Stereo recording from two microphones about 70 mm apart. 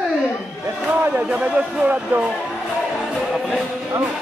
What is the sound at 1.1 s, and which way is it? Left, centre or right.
Speech, centre.